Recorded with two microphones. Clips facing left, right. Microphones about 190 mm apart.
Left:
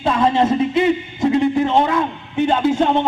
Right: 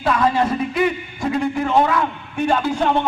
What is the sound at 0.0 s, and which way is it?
A man's voice, 25° left (ahead or behind).